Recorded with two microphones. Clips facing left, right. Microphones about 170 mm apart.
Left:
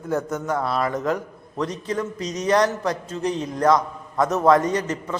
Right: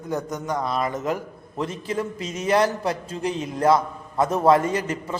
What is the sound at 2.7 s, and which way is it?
Speech, 30° right (ahead or behind).